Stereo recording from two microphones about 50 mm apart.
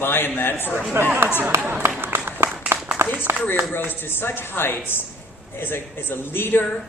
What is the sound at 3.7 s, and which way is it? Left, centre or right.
Speech, left.